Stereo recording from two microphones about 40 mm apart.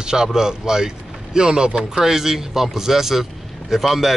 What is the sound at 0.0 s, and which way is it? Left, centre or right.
Speech, centre.